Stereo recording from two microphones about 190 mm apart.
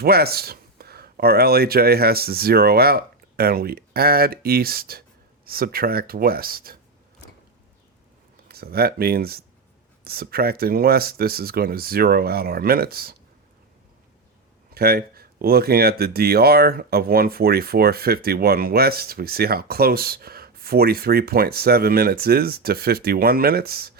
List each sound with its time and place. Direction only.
0.0 s speech: 55° right (ahead or behind)
8.4 s speech: 55° right (ahead or behind)
14.7 s speech: 55° right (ahead or behind)